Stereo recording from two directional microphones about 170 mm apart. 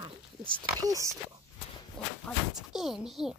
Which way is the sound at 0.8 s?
20° right (ahead or behind).